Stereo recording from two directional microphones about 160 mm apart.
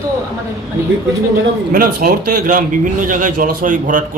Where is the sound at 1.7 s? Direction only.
55° right (ahead or behind).